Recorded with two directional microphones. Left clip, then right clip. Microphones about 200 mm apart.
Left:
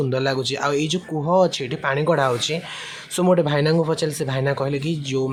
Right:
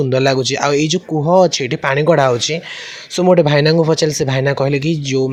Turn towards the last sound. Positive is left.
turn(degrees=-25)  # may be behind; listen again after turning